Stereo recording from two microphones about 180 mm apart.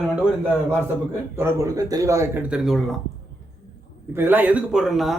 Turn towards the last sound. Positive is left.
turn(degrees=0)  # may be behind; listen again after turning